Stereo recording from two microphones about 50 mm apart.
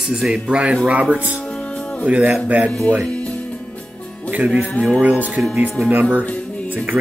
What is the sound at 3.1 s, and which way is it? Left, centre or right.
Music, left.